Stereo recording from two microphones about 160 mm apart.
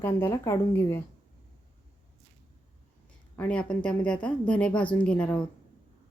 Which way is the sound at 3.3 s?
10° left (ahead or behind).